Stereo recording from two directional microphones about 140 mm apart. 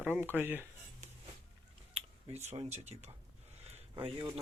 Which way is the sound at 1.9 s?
50° right (ahead or behind).